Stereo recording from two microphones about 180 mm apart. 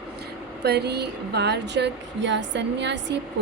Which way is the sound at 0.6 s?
65° right (ahead or behind).